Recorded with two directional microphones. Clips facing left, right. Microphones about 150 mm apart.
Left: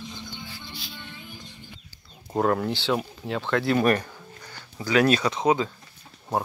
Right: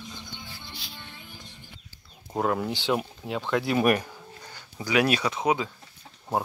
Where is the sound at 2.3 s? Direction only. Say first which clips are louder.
Left 3 dB; 5° right (ahead or behind).